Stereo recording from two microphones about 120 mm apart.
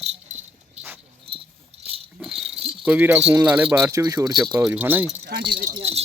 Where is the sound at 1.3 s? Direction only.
50° right (ahead or behind).